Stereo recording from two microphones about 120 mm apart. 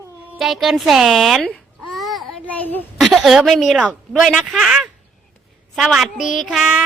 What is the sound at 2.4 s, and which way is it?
Speech, 15° left (ahead or behind).